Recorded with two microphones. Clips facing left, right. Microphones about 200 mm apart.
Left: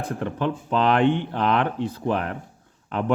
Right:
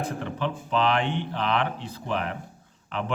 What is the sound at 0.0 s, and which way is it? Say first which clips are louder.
Speech: left 3 dB; 50° left (ahead or behind).